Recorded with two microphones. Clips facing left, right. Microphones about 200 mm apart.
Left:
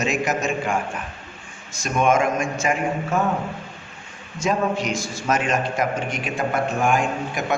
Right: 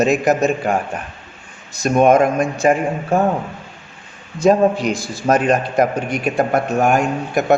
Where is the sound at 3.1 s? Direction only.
35° right (ahead or behind).